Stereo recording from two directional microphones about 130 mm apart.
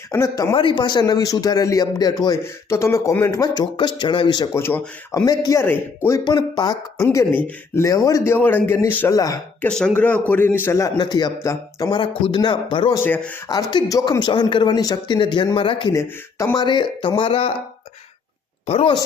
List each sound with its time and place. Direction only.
0.1 s a man's voice: 20° left (ahead or behind)
0.5 s a man's voice: 40° left (ahead or behind)
4.5 s a man's voice: 20° left (ahead or behind)
5.6 s a man's voice: 15° left (ahead or behind)
6.2 s a man's voice: 30° left (ahead or behind)
7.3 s a man's voice: 10° left (ahead or behind)
7.8 s a man's voice: 25° left (ahead or behind)
9.1 s a man's voice: 25° left (ahead or behind)
9.6 s a man's voice: 5° left (ahead or behind); by 12.9 s 35° left (ahead or behind)
12.9 s a man's voice: 15° left (ahead or behind)
13.5 s speech: 30° left (ahead or behind)
15.9 s a man's voice: 25° left (ahead or behind)
16.6 s speech: 35° left (ahead or behind)
18.6 s speech: 50° left (ahead or behind)